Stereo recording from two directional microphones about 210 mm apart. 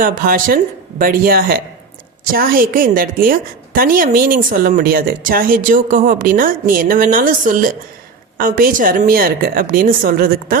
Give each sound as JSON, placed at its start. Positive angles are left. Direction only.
{"t": 0.0, "sound": "a woman's voice", "side_deg": -40}